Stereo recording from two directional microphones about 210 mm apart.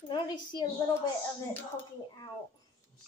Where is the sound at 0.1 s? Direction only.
20° left (ahead or behind).